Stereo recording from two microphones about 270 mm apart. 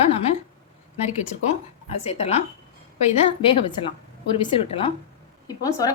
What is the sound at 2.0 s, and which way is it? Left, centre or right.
A woman's voice, left.